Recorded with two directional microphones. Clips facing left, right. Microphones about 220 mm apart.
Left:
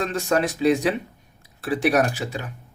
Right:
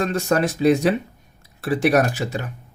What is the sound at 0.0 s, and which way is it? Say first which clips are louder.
Speech: right 2 dB; 40° right (ahead or behind).